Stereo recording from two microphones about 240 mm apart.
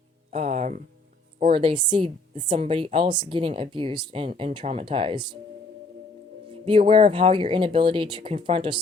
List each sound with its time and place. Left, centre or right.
0.3 s music: right
1.4 s speech: right
6.7 s speech: right